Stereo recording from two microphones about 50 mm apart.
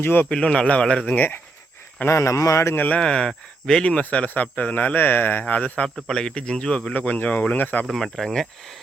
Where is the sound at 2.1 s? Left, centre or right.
Left.